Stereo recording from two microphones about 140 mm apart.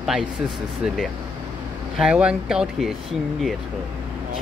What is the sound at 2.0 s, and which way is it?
Speech, 5° right (ahead or behind).